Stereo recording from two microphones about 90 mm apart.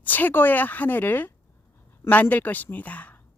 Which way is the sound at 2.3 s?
20° left (ahead or behind).